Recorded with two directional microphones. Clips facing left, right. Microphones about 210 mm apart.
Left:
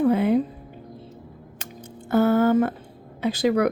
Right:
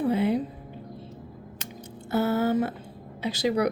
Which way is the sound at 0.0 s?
50° left (ahead or behind).